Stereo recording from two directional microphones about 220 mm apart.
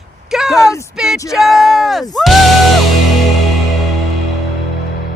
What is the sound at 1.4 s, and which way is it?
Speech, 15° left (ahead or behind).